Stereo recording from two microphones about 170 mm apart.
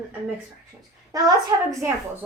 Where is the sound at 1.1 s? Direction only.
20° right (ahead or behind).